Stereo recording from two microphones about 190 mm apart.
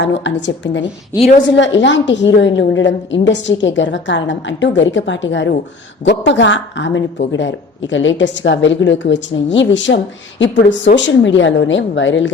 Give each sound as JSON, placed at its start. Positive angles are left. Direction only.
{"t": 0.0, "sound": "speech", "side_deg": 70}